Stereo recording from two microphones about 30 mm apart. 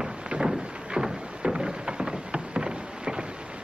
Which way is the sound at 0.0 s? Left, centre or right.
Right.